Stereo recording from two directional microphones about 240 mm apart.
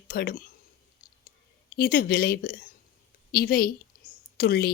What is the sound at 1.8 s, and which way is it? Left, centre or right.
A woman's voice, left.